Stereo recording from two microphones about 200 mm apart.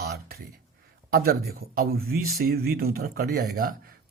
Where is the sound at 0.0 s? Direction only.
50° right (ahead or behind).